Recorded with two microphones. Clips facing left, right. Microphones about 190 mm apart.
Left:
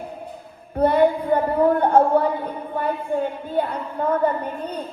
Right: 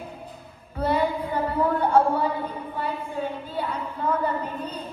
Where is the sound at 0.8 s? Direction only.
55° left (ahead or behind).